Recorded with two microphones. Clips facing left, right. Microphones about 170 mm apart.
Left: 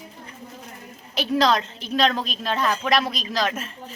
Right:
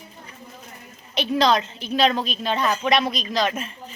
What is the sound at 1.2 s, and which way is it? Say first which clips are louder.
A woman's voice: right 1 dB; centre (ahead or behind).